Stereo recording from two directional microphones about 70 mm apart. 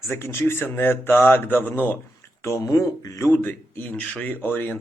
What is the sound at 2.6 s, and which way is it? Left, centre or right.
Speech, left.